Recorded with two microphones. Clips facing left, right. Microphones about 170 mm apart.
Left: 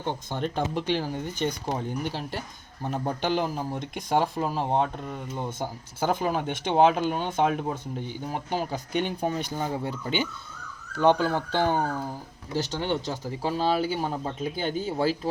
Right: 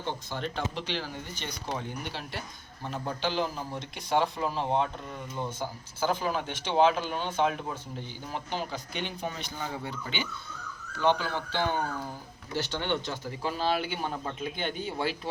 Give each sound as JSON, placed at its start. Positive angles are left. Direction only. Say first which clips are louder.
{"t": 0.0, "sound": "speech", "louder": "left 4 dB", "side_deg": 50}
{"t": 5.5, "sound": "speech", "louder": "left 3 dB", "side_deg": 55}